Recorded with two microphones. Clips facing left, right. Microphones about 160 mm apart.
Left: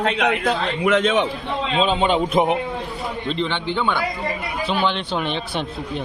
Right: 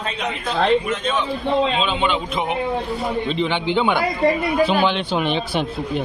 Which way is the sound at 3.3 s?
5° right (ahead or behind).